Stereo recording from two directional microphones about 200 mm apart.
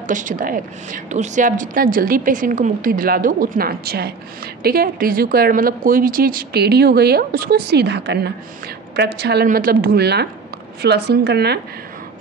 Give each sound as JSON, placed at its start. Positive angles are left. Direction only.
{"t": 0.0, "sound": "a woman's voice", "side_deg": -40}